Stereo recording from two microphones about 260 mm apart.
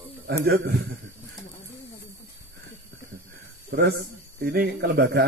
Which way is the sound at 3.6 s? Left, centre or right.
Right.